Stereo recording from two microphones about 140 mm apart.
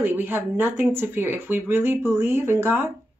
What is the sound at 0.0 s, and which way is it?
Speech, 15° right (ahead or behind).